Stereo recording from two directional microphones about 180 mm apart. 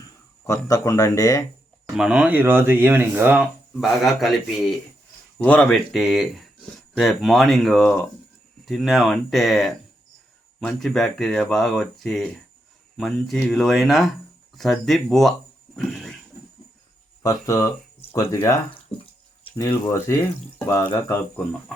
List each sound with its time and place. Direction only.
0.4 s speech: 15° left (ahead or behind)
2.0 s speech: 5° right (ahead or behind)
17.2 s speech: 20° left (ahead or behind)
18.9 s speech: 5° left (ahead or behind)
19.5 s speech: 20° left (ahead or behind)